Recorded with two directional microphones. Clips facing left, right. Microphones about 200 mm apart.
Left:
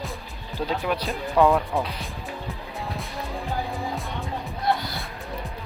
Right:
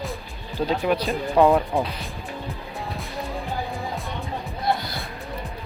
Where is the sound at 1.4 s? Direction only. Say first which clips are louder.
Right 2 dB; 15° right (ahead or behind).